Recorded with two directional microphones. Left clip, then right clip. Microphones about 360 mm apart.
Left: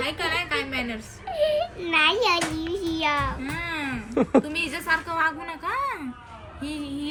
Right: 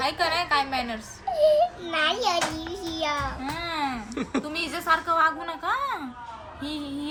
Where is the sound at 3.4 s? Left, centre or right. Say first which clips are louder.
Even; centre.